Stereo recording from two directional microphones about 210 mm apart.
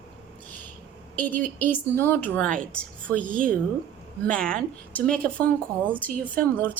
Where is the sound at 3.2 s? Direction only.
40° right (ahead or behind).